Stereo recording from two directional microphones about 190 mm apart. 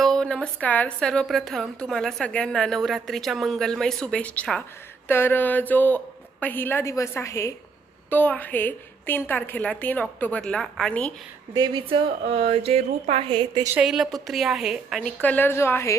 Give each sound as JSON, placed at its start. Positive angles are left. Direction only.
{"t": 0.0, "sound": "a woman's voice", "side_deg": 5}
{"t": 11.5, "sound": "speech", "side_deg": -20}
{"t": 13.7, "sound": "a woman's voice", "side_deg": -5}